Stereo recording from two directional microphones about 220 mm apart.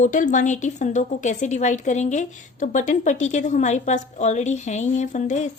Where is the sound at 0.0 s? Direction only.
35° left (ahead or behind).